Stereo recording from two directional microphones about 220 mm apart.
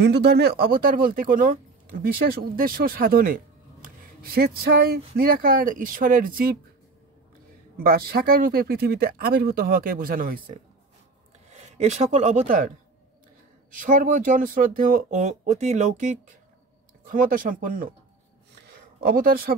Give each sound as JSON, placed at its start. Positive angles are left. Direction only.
{"t": 0.0, "sound": "speech", "side_deg": -50}
{"t": 7.7, "sound": "speech", "side_deg": -45}
{"t": 13.9, "sound": "speech", "side_deg": -35}
{"t": 18.7, "sound": "a sound", "side_deg": -40}